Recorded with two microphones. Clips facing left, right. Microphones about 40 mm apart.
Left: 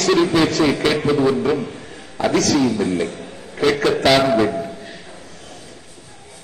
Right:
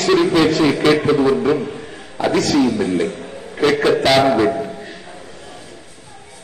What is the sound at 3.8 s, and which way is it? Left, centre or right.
Speech, centre.